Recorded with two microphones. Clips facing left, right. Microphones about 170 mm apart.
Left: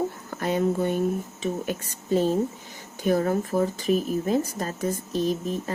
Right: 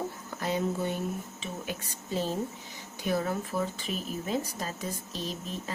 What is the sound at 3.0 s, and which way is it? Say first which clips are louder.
Speech: left 7 dB; 45° left (ahead or behind).